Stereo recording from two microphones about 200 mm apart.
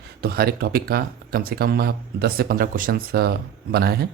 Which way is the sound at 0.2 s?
50° right (ahead or behind).